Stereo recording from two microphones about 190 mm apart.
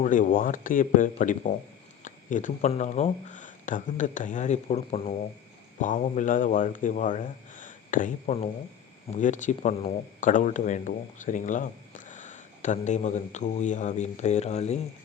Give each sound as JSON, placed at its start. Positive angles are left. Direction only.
{"t": 0.0, "sound": "speech", "side_deg": 45}